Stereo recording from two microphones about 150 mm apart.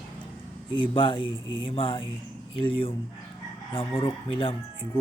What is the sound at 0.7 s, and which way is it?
Speech, 35° left (ahead or behind).